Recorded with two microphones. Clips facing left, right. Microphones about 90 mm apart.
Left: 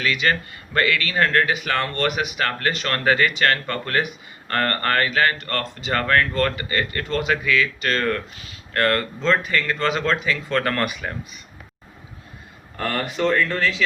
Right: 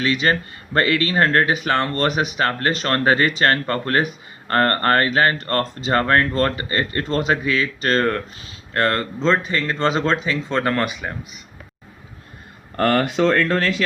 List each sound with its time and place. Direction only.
0.0 s speech: 30° right (ahead or behind)
12.7 s speech: 60° right (ahead or behind)